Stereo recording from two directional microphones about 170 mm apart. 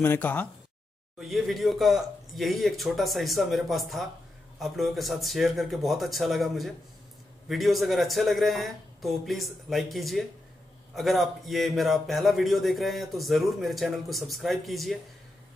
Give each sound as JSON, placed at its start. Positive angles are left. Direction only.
{"t": 0.0, "sound": "a man's voice", "side_deg": 10}